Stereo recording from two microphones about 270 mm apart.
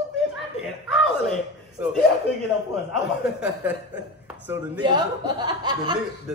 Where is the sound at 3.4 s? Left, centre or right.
Centre.